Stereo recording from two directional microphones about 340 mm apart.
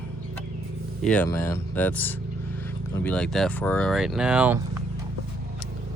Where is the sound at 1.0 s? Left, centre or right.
Centre.